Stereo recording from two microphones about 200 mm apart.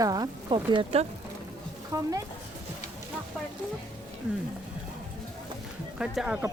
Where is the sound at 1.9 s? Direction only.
15° right (ahead or behind).